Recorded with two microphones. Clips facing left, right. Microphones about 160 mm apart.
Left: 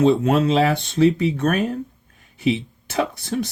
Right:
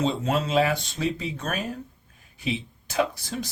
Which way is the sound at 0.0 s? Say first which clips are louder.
Left 9 dB; 60° left (ahead or behind).